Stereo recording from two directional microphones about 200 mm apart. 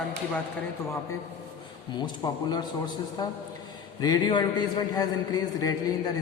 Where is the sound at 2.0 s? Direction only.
20° left (ahead or behind).